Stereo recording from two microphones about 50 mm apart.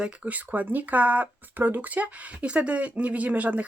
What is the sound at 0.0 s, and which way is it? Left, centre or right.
Speech, right.